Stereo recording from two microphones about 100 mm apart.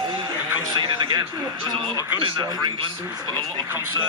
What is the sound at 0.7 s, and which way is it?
Speech, 50° right (ahead or behind).